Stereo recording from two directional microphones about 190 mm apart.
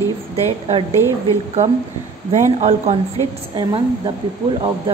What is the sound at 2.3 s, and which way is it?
Speech, 35° right (ahead or behind).